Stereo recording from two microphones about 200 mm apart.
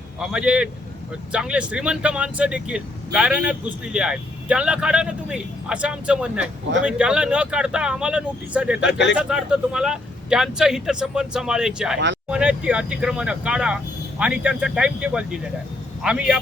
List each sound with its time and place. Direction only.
0.2 s speech: 5° right (ahead or behind)
8.8 s speech: 60° left (ahead or behind)
9.1 s speech: 5° right (ahead or behind)